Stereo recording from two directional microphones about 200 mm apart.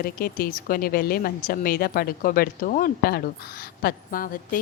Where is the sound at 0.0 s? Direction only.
45° left (ahead or behind).